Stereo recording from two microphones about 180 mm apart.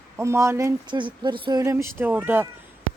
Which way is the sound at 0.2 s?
15° right (ahead or behind).